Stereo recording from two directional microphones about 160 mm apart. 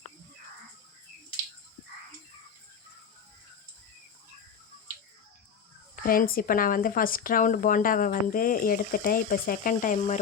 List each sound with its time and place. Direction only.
6.0 s speech: 65° left (ahead or behind)